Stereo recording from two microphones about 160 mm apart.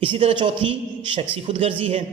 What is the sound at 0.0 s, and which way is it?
A man's voice, 35° right (ahead or behind).